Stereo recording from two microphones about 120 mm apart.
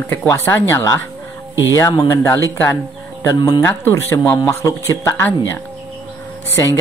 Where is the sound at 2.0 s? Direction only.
25° left (ahead or behind).